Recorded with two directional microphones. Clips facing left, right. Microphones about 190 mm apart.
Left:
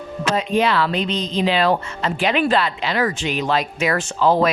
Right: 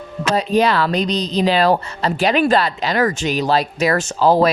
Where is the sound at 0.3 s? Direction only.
40° right (ahead or behind).